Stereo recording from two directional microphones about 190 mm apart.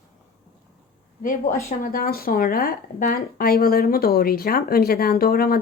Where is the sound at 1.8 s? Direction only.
50° left (ahead or behind).